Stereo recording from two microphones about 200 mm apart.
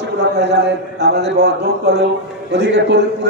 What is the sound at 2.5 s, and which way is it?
Speech, 60° right (ahead or behind).